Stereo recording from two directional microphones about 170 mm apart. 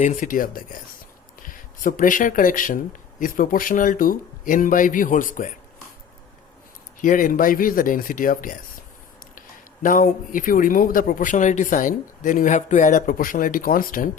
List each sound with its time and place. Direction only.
0.0 s a man's voice: 50° left (ahead or behind)
7.0 s a man's voice: 50° left (ahead or behind)
9.8 s a man's voice: 50° left (ahead or behind)